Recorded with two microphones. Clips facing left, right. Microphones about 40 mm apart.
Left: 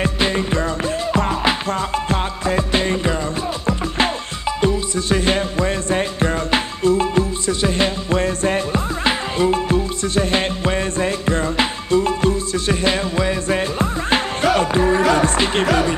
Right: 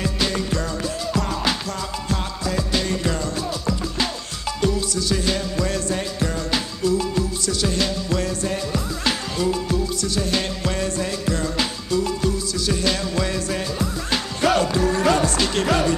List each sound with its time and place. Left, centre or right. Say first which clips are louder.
0.0 s music: left 4 dB; left